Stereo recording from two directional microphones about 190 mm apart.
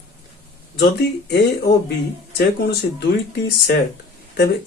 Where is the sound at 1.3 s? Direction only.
60° left (ahead or behind).